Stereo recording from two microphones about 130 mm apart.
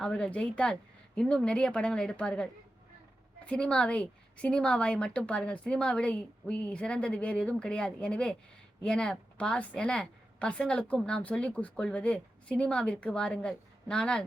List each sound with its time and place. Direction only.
0.0 s a woman's voice: 5° left (ahead or behind)